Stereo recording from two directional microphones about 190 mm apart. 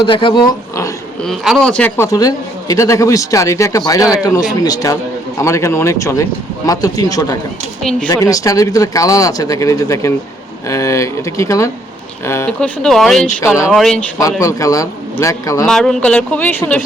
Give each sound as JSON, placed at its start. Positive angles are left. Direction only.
{"t": 0.0, "sound": "speech", "side_deg": 25}
{"t": 1.2, "sound": "a man's voice", "side_deg": 0}
{"t": 7.8, "sound": "speech", "side_deg": 5}
{"t": 8.0, "sound": "a man's voice", "side_deg": 20}
{"t": 14.2, "sound": "a man's voice", "side_deg": 15}
{"t": 15.6, "sound": "a man's voice", "side_deg": 5}